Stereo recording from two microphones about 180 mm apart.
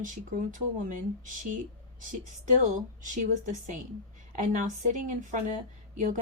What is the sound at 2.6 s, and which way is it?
Speech, 45° right (ahead or behind).